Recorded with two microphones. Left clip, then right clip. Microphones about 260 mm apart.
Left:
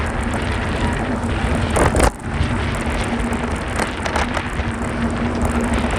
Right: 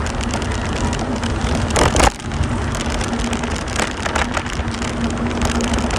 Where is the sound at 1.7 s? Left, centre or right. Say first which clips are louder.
Right 2 dB; left.